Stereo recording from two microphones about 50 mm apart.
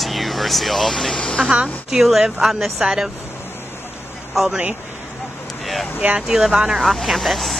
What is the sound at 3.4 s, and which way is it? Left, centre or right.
Vehicle, left.